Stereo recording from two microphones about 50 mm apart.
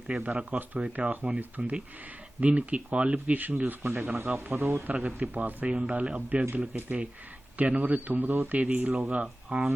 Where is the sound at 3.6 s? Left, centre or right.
Right.